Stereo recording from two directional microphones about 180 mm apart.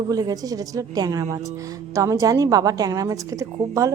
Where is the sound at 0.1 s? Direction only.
20° right (ahead or behind).